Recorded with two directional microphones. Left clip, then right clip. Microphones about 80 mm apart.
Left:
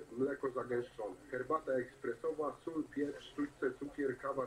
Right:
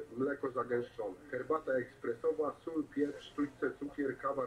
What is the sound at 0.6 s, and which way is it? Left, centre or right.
Speech, right.